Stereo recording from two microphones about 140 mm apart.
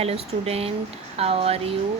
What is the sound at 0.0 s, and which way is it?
Speech, 45° right (ahead or behind).